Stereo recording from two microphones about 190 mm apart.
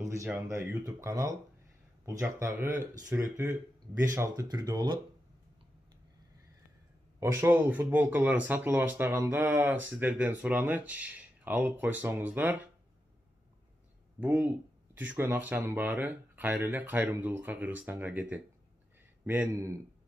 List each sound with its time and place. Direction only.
0.1 s speech: 15° right (ahead or behind)
7.2 s speech: 15° right (ahead or behind)
14.2 s speech: 10° right (ahead or behind)